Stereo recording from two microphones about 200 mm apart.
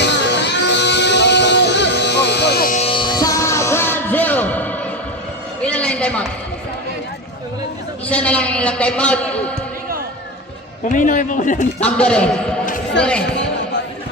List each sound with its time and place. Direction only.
0.0 s music: 60° left (ahead or behind)
2.7 s music: 30° left (ahead or behind); by 4.8 s 10° left (ahead or behind)
5.6 s a sound: 5° left (ahead or behind)
8.0 s a man's voice: 5° left (ahead or behind)
10.8 s a man's voice: 40° left (ahead or behind)
11.8 s a man's voice: 5° left (ahead or behind)